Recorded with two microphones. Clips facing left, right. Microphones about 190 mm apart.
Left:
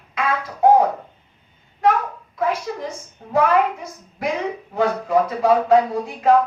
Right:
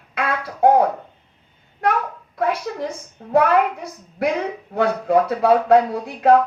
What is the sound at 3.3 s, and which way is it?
Speech, 60° right (ahead or behind).